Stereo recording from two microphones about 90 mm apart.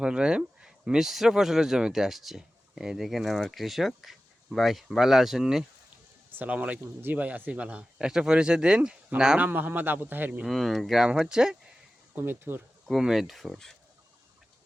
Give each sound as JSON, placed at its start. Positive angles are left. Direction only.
{"t": 0.0, "sound": "speech", "side_deg": -10}
{"t": 6.3, "sound": "speech", "side_deg": -15}
{"t": 9.4, "sound": "a man's voice", "side_deg": -20}
{"t": 10.4, "sound": "speech", "side_deg": 0}
{"t": 12.1, "sound": "a man's voice", "side_deg": -25}
{"t": 12.9, "sound": "speech", "side_deg": -5}